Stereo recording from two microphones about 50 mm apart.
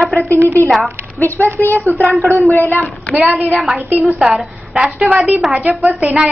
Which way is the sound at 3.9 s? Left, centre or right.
Right.